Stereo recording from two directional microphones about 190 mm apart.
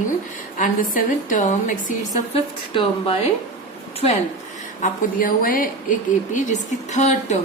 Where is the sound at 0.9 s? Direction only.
40° left (ahead or behind).